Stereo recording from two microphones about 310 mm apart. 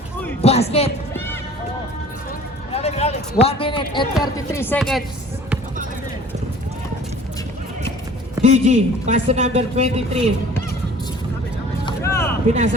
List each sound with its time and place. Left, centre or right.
0.4 s a woman's voice: centre
2.7 s a man's voice: centre
8.4 s a man's voice: right
11.9 s a sound: centre